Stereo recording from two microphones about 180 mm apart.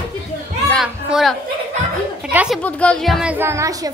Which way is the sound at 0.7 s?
Centre (ahead or behind).